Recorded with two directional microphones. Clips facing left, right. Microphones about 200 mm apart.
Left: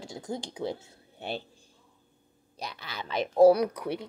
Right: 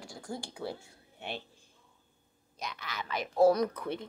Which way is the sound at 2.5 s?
35° left (ahead or behind).